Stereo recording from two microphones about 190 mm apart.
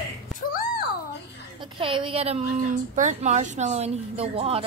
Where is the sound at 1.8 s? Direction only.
30° right (ahead or behind).